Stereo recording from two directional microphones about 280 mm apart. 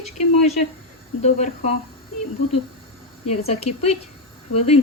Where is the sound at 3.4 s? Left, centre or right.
Left.